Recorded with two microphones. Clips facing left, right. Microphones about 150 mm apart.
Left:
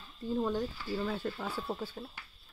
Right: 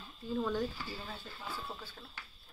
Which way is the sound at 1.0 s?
70° left (ahead or behind).